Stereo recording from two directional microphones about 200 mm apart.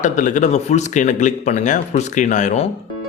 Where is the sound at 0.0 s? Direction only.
40° left (ahead or behind).